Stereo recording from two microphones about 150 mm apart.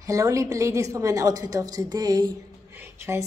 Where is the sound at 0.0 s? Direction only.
20° right (ahead or behind).